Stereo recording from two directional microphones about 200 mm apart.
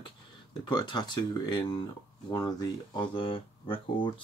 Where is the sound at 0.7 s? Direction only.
20° left (ahead or behind).